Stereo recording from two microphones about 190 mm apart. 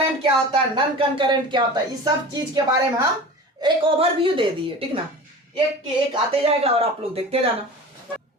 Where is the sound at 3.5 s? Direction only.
25° right (ahead or behind).